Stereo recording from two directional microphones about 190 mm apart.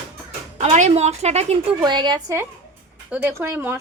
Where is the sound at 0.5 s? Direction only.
40° right (ahead or behind).